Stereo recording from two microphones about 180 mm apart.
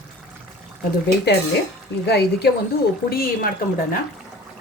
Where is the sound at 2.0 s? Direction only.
65° left (ahead or behind).